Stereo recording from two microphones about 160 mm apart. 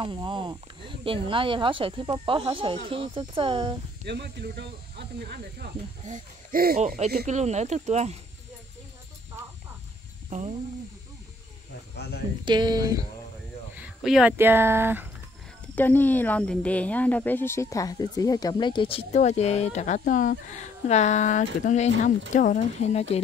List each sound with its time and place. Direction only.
0.0 s speech: 30° right (ahead or behind)
4.0 s speech: 90° right
6.0 s speech: 55° right (ahead or behind)
7.2 s speech: 45° right (ahead or behind)
11.9 s speech: 90° left
12.4 s speech: 25° right (ahead or behind)
13.7 s a sound: 5° right (ahead or behind)
14.3 s speech: 15° right (ahead or behind)
15.7 s speech: 10° left (ahead or behind); by 23.2 s 40° left (ahead or behind)